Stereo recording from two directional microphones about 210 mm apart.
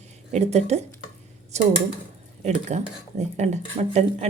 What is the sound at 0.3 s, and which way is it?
Speech, 30° right (ahead or behind).